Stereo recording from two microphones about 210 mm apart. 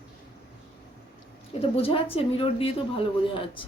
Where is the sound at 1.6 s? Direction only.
25° left (ahead or behind).